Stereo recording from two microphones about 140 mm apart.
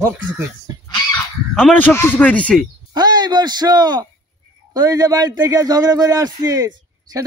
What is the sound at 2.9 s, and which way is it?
A man's voice, 30° right (ahead or behind).